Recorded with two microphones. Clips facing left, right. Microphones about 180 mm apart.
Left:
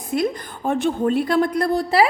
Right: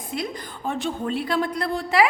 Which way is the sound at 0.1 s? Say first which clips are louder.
Left 8 dB; 50° left (ahead or behind).